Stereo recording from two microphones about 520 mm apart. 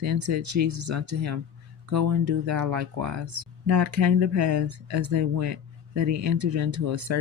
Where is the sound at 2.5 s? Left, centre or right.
Right.